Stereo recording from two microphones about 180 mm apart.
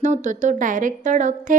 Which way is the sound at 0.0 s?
45° right (ahead or behind).